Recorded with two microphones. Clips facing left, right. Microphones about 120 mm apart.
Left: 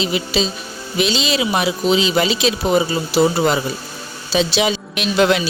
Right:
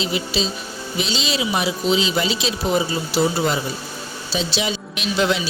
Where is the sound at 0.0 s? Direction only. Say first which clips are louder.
Left 3 dB; 75° left (ahead or behind).